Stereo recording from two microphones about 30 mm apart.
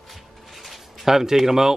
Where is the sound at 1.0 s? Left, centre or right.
Centre.